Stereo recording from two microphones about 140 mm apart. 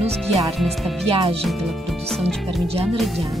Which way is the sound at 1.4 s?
Centre (ahead or behind).